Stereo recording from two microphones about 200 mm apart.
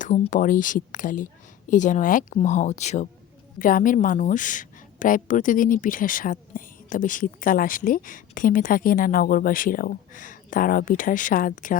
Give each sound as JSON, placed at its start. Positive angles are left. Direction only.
{"t": 0.0, "sound": "a woman's voice", "side_deg": 40}